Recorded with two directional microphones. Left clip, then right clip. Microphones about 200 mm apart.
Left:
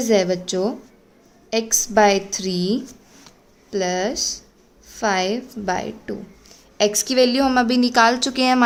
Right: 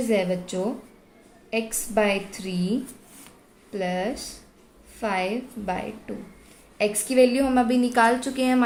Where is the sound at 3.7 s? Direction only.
55° left (ahead or behind).